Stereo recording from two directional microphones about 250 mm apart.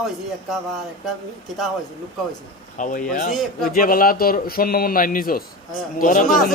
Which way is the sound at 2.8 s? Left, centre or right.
Left.